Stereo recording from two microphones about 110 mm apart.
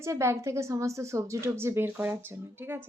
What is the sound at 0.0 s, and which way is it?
A woman's voice, 25° right (ahead or behind).